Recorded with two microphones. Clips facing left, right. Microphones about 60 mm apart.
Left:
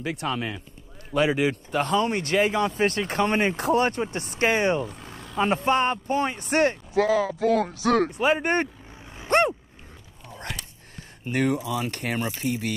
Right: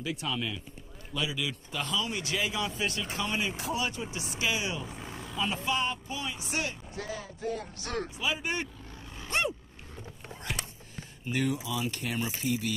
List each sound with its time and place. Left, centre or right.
0.0 s speech: left
4.8 s vehicle: centre
5.3 s speech: left
7.0 s speech: left
8.2 s speech: left
9.3 s a sound: left
11.2 s speech: left